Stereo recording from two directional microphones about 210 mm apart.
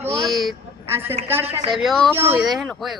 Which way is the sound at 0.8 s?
10° right (ahead or behind).